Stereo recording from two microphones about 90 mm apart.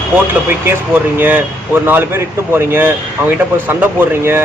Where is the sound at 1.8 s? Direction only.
25° right (ahead or behind).